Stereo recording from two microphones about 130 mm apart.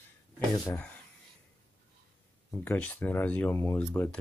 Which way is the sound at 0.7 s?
10° left (ahead or behind).